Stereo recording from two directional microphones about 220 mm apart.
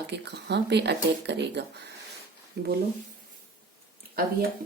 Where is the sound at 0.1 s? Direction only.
50° right (ahead or behind).